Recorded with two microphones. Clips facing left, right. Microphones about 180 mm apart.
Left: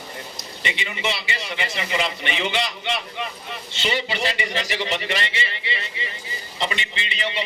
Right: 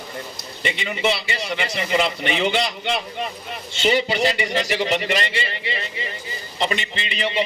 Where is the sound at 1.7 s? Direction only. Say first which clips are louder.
Right 5 dB; 45° right (ahead or behind).